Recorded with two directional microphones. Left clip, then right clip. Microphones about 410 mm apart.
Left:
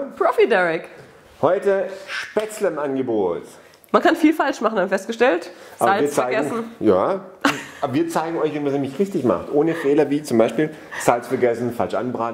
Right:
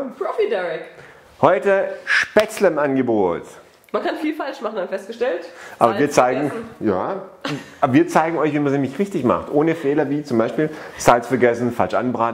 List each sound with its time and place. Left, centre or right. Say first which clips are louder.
0.2 s a woman's voice: left 5 dB; left
1.4 s speech: right 3 dB; right
3.9 s speech: left 6 dB; left
5.8 s speech: right 3 dB; right
6.8 s speech: left 4 dB; right
7.4 s a woman's voice: left 8 dB; left
7.8 s speech: right 6 dB; right
9.9 s speech: left 2 dB; right
11.1 s speech: right 4 dB; right